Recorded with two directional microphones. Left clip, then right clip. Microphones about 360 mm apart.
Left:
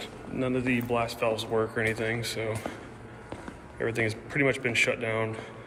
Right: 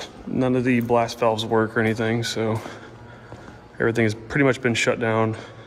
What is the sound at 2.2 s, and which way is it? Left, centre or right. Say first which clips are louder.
Speech: right 7 dB; centre.